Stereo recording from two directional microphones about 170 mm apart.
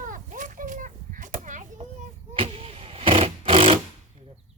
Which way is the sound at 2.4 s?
35° right (ahead or behind).